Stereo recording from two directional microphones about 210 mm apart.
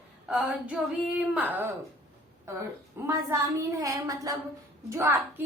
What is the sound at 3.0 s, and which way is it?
A woman's voice, 10° right (ahead or behind).